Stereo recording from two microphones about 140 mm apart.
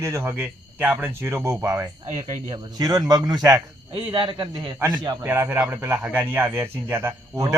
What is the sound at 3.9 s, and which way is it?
Speech, 40° right (ahead or behind).